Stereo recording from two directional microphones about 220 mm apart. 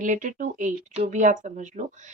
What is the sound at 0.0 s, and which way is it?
Speech, 35° right (ahead or behind).